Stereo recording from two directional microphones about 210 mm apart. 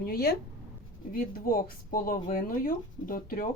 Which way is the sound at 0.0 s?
45° left (ahead or behind).